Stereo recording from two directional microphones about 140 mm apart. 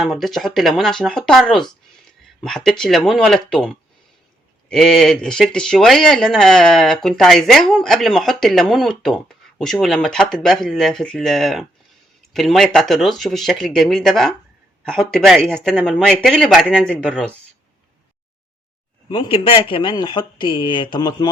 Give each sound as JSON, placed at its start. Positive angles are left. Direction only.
{"t": 0.0, "sound": "speech", "side_deg": 0}
{"t": 19.0, "sound": "speech", "side_deg": 40}